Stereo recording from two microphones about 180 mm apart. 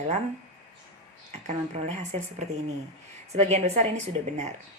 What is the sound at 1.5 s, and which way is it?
Speech, 40° right (ahead or behind).